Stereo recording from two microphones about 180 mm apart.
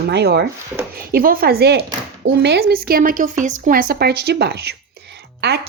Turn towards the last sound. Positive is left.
turn(degrees=-70)  # may be behind; listen again after turning